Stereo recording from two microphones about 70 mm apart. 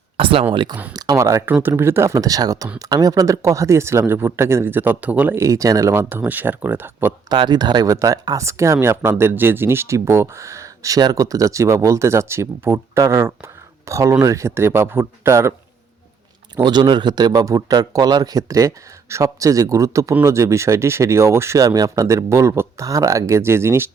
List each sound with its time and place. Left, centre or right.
1.1 s speech: right
1.6 s speech: right
4.0 s speech: right
5.3 s speech: right
5.9 s speech: right
7.3 s speech: right
7.9 s speech: right
16.6 s a man's voice: right
17.7 s speech: right
21.6 s speech: right